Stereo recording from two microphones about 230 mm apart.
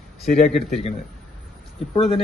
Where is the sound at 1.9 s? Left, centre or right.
Left.